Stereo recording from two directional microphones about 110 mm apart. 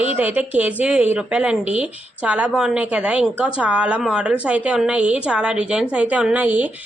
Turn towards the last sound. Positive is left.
turn(degrees=-15)  # may be behind; listen again after turning